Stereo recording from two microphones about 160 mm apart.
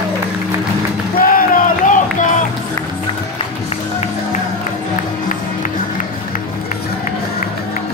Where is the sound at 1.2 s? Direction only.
60° left (ahead or behind).